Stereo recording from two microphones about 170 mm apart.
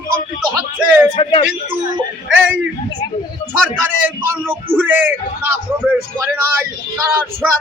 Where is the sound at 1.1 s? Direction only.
30° left (ahead or behind).